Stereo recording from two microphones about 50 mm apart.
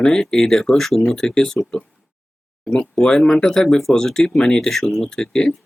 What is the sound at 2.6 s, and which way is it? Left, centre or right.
Speech, centre.